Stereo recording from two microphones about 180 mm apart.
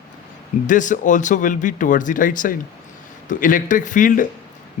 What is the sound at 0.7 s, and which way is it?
Speech, 45° left (ahead or behind).